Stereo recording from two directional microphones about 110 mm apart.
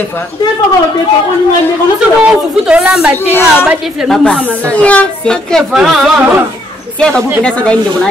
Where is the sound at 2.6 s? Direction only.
10° right (ahead or behind).